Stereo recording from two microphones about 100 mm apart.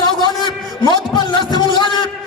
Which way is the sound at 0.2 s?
50° left (ahead or behind).